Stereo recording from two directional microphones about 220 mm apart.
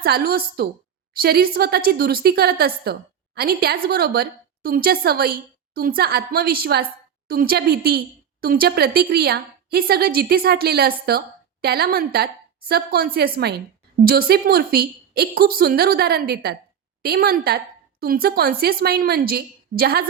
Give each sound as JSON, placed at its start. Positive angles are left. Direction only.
{"t": 0.0, "sound": "speech", "side_deg": -45}